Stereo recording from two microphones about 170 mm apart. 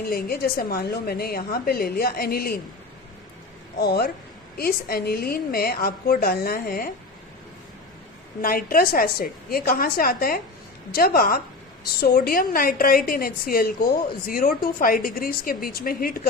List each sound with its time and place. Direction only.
0.1 s a woman's voice: 65° left (ahead or behind)
3.8 s a woman's voice: 65° left (ahead or behind)
8.4 s a woman's voice: 60° left (ahead or behind)